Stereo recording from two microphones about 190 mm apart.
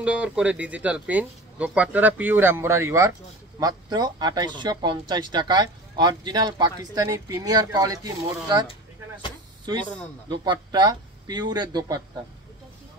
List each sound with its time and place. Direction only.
0.0 s speech: 5° right (ahead or behind)
10.4 s speech: 20° right (ahead or behind)